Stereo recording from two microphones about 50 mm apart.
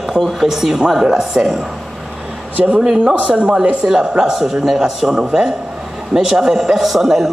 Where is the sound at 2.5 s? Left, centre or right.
Right.